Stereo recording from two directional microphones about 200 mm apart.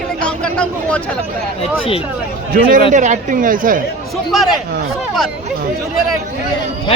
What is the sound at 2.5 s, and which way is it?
Speech, 50° right (ahead or behind).